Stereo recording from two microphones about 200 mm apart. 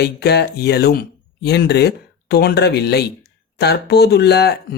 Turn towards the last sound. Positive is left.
turn(degrees=55)  # may be behind; listen again after turning